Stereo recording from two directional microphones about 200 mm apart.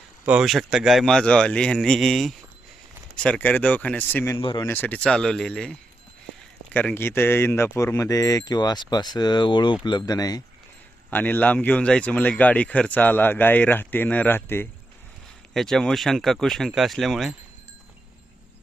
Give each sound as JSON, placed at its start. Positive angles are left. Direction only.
{"t": 0.3, "sound": "speech", "side_deg": 0}
{"t": 4.4, "sound": "speech", "side_deg": 25}
{"t": 4.6, "sound": "speech", "side_deg": 10}